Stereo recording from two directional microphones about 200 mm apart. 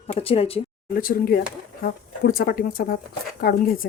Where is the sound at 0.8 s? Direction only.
45° left (ahead or behind).